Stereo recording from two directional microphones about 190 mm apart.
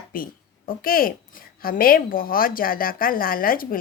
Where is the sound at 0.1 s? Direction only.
50° left (ahead or behind).